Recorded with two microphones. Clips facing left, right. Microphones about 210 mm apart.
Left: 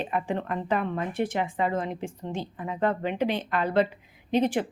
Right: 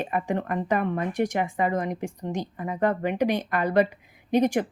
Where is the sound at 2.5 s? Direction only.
50° right (ahead or behind).